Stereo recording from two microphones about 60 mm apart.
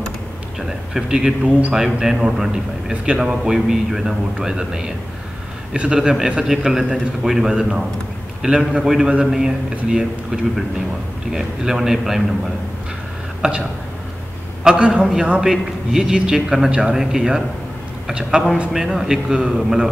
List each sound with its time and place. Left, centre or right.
0.6 s a man's voice: centre
13.4 s a man's voice: centre